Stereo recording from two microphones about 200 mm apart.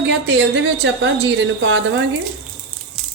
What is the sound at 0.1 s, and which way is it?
A woman's voice, 70° right (ahead or behind).